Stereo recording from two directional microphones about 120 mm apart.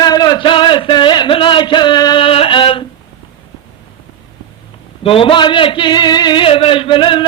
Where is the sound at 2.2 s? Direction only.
50° left (ahead or behind).